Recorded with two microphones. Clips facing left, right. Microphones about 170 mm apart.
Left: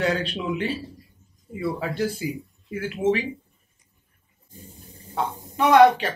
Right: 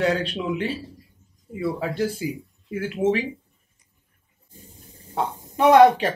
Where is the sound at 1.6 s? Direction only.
30° right (ahead or behind).